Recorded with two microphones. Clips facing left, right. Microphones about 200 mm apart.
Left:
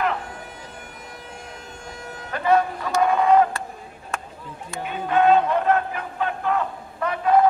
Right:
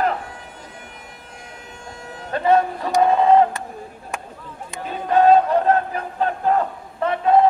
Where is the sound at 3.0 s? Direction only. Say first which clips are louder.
Right 3 dB; 25° right (ahead or behind).